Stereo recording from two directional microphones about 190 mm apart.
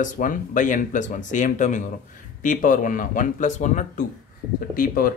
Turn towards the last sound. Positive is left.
turn(degrees=50)  # may be behind; listen again after turning